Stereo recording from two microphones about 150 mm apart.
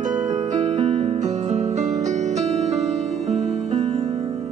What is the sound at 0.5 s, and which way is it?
Music, 45° right (ahead or behind).